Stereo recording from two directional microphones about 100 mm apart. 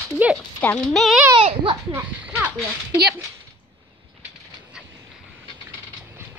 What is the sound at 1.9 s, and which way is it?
Speech, 20° right (ahead or behind).